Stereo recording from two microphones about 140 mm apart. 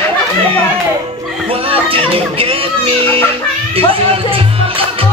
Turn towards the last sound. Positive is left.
turn(degrees=-40)  # may be behind; listen again after turning